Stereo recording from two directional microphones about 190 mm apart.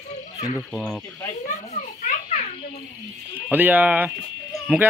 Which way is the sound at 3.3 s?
10° right (ahead or behind).